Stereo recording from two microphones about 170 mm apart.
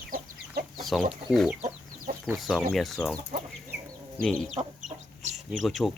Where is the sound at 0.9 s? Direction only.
Centre (ahead or behind).